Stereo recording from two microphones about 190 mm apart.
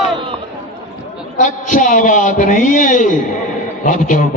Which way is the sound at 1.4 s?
40° left (ahead or behind).